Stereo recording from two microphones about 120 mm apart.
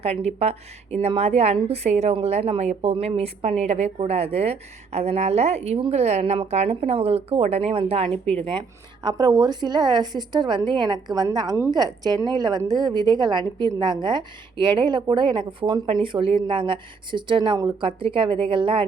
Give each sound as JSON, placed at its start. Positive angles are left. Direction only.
{"t": 0.0, "sound": "a woman's voice", "side_deg": -60}
{"t": 9.0, "sound": "a woman's voice", "side_deg": -35}